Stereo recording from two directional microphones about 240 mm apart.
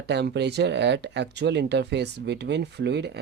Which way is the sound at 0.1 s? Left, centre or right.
Right.